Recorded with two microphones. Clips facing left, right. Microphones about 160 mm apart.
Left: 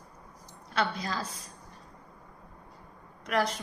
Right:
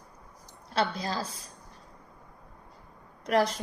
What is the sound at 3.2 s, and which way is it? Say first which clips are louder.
Speech: right 4 dB; 35° right (ahead or behind).